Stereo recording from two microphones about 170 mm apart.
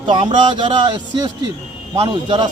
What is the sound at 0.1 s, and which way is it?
Speech, 30° right (ahead or behind).